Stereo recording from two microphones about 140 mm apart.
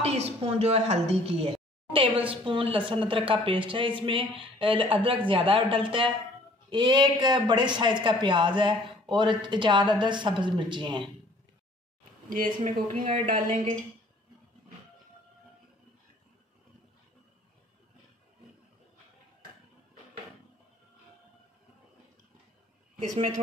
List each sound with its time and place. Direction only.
0.0 s a woman's voice: 50° right (ahead or behind)
12.3 s speech: 75° right (ahead or behind)
13.0 s speech: 65° right (ahead or behind)
22.9 s speech: 60° right (ahead or behind)